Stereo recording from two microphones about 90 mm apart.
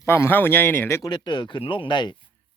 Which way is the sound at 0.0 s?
30° left (ahead or behind).